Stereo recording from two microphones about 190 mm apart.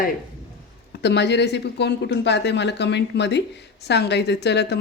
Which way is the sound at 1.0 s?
65° left (ahead or behind).